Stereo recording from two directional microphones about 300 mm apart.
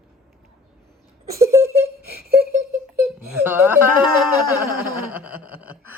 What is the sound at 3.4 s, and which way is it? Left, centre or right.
Speech, centre.